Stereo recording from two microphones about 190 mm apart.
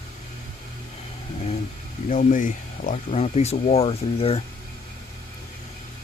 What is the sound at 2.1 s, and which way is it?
Speech, 40° left (ahead or behind).